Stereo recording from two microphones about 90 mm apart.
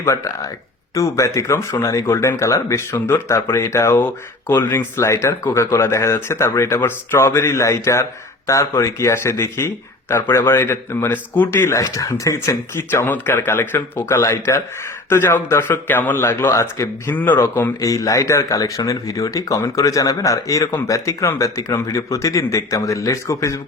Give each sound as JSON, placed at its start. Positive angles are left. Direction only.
{"t": 0.0, "sound": "speech", "side_deg": 30}
{"t": 12.9, "sound": "speech", "side_deg": 25}
{"t": 17.2, "sound": "speech", "side_deg": 20}
{"t": 17.7, "sound": "speech", "side_deg": 40}
{"t": 20.7, "sound": "speech", "side_deg": 25}
{"t": 20.9, "sound": "speech", "side_deg": 35}